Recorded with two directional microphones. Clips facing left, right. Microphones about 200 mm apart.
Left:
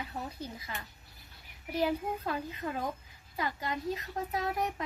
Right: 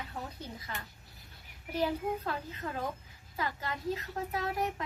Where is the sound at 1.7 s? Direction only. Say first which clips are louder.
Left 1 dB; 10° left (ahead or behind).